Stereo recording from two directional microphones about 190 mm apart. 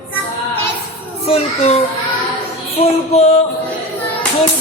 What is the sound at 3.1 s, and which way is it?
Speech, 35° left (ahead or behind).